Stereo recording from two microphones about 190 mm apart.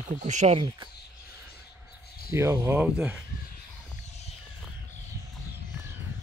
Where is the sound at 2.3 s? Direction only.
15° right (ahead or behind).